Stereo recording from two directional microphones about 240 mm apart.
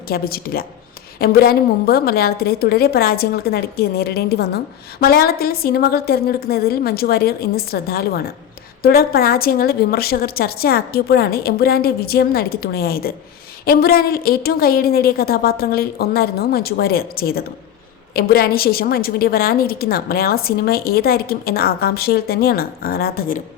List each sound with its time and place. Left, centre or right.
0.1 s a woman's voice: left